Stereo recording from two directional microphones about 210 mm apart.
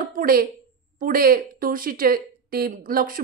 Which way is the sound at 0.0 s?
45° right (ahead or behind).